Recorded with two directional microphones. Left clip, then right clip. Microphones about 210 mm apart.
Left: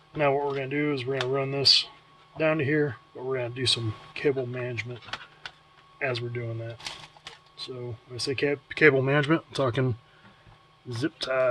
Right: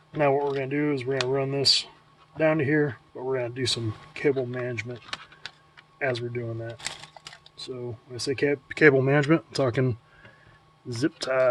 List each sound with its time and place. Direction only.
0.1 s speech: 30° right (ahead or behind)
8.1 s speech: 35° right (ahead or behind); by 9.9 s 15° right (ahead or behind)
10.8 s speech: 30° right (ahead or behind)